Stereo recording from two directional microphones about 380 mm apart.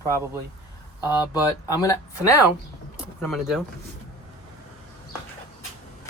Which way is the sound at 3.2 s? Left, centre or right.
Centre.